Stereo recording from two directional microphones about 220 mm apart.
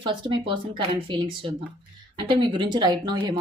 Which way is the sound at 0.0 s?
20° right (ahead or behind).